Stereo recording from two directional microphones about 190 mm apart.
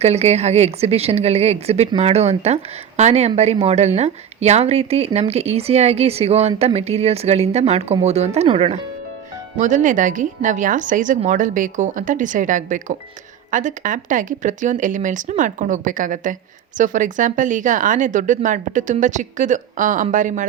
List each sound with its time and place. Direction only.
0.0 s a woman's voice: 35° right (ahead or behind)